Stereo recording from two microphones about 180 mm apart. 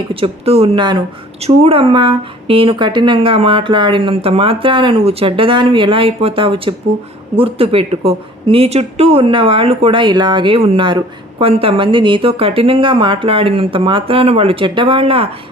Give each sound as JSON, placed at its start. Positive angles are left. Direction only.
{"t": 0.1, "sound": "a woman's voice", "side_deg": -30}